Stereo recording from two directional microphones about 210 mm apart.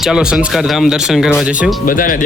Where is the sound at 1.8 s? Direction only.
40° left (ahead or behind).